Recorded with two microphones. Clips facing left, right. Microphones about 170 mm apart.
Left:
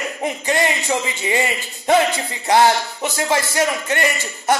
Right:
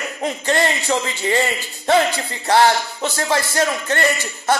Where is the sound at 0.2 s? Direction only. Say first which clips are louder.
Right 1 dB; 15° left (ahead or behind).